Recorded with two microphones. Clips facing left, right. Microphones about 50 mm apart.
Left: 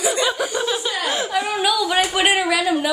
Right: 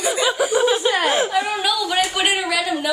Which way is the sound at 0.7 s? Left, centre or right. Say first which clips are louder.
Right 5 dB; right.